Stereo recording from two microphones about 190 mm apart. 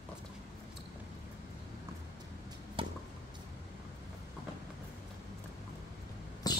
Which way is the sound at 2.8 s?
30° right (ahead or behind).